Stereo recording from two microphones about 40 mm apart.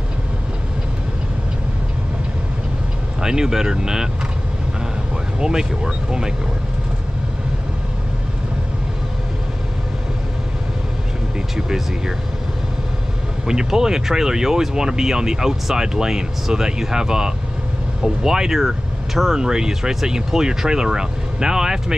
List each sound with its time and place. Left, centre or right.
3.2 s speech: centre
5.4 s speech: centre
13.5 s speech: centre